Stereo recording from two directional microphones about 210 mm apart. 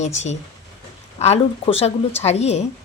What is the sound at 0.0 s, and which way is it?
A woman's voice, 35° left (ahead or behind).